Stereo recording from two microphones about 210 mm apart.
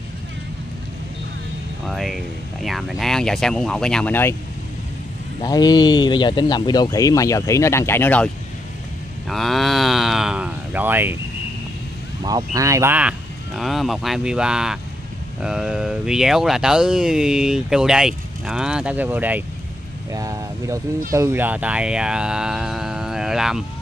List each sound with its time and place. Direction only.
1.9 s speech: centre (ahead or behind)
5.4 s speech: 20° left (ahead or behind)
9.3 s cattle: centre (ahead or behind)
12.2 s speech: 20° right (ahead or behind); by 23.6 s centre (ahead or behind)